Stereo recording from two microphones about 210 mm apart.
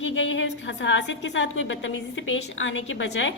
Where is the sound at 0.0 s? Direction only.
60° left (ahead or behind).